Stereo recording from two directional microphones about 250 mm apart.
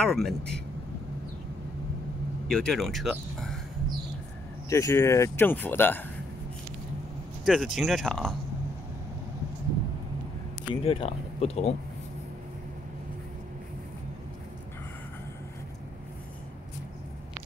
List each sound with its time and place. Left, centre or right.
0.0 s speech: centre
2.4 s speech: centre
4.6 s speech: centre
7.4 s speech: centre
10.7 s speech: left